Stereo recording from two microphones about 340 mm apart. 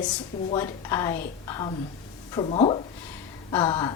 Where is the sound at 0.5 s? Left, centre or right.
Centre.